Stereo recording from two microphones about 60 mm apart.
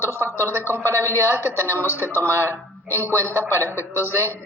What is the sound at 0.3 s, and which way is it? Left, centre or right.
A woman's voice, right.